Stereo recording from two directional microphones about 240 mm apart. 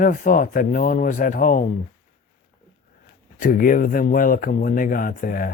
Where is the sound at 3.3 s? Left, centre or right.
Left.